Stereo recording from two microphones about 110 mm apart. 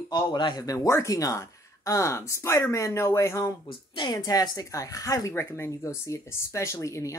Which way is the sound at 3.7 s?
45° left (ahead or behind).